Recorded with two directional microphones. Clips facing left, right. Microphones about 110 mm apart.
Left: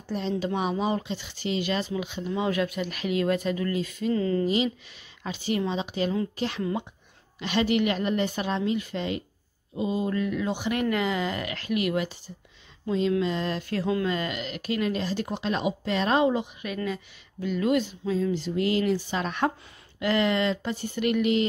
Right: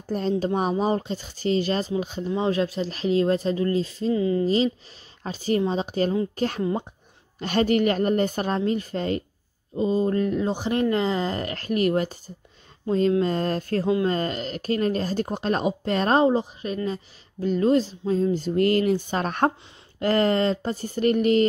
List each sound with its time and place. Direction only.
0.1 s speech: 45° right (ahead or behind)
4.1 s speech: 15° right (ahead or behind)
5.2 s a woman's voice: 40° right (ahead or behind)
13.2 s a woman's voice: 45° right (ahead or behind)